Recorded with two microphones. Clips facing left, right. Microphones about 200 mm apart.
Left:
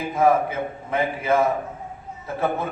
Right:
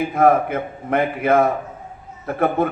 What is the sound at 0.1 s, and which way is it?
A man's voice, 60° right (ahead or behind).